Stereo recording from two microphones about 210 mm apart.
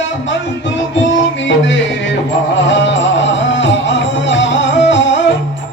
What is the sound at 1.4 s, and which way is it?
Music, 60° left (ahead or behind).